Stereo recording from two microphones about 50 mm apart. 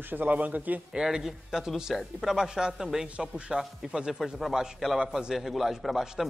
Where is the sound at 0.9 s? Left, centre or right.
Centre.